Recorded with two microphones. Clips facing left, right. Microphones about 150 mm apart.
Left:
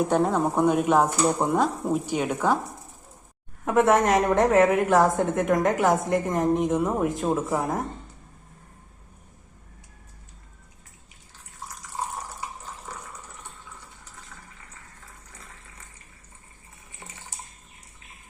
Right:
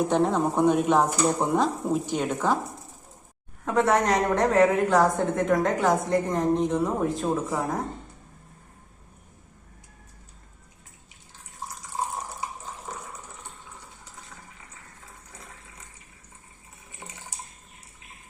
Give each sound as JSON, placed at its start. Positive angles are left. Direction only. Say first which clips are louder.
{"t": 0.1, "sound": "speech", "louder": "even", "side_deg": 10}
{"t": 3.7, "sound": "a woman's voice", "louder": "left 3 dB", "side_deg": 20}